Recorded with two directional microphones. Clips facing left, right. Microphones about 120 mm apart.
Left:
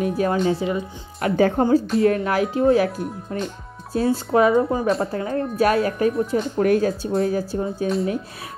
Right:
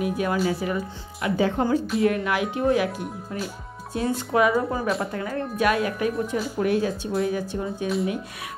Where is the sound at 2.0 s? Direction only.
35° left (ahead or behind).